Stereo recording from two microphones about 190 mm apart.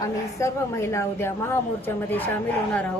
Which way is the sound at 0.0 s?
15° left (ahead or behind).